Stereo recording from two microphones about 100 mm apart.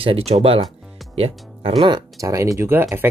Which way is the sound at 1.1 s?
90° right.